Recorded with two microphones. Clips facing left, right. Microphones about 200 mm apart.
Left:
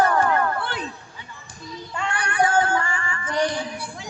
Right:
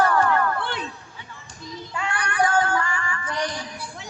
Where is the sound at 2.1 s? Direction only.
25° left (ahead or behind).